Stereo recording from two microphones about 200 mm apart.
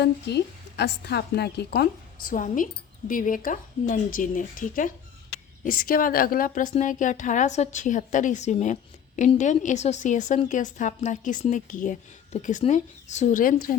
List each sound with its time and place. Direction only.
0.0 s a woman's voice: 55° left (ahead or behind)
2.3 s a woman's voice: 40° left (ahead or behind)